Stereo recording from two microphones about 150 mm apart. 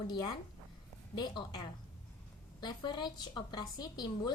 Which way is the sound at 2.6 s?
30° left (ahead or behind).